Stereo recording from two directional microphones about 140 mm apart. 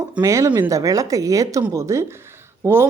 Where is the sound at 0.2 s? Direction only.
20° right (ahead or behind).